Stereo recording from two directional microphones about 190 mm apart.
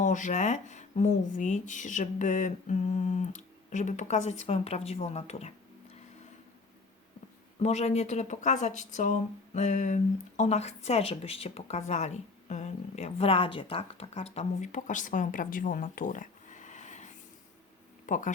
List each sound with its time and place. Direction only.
0.0 s a woman's voice: 40° left (ahead or behind)
7.6 s a woman's voice: 35° left (ahead or behind)